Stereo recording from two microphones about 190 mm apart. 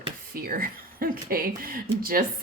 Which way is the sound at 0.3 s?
50° right (ahead or behind).